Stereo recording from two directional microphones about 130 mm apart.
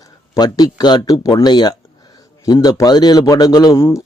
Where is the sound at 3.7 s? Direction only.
20° left (ahead or behind).